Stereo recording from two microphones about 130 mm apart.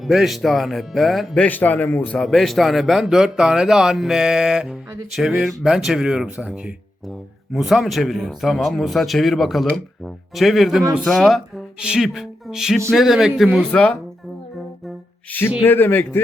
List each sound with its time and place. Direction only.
0.0 s a man's voice: centre (ahead or behind)
1.5 s a man's voice: 15° left (ahead or behind)
13.7 s a man's voice: 10° left (ahead or behind)
15.3 s a man's voice: 15° left (ahead or behind)